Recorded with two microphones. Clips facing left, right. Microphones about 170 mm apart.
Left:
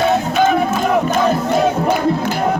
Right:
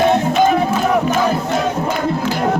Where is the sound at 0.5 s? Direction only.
5° right (ahead or behind).